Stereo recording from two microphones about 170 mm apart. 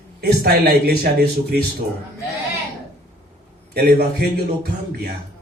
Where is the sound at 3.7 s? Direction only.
65° right (ahead or behind).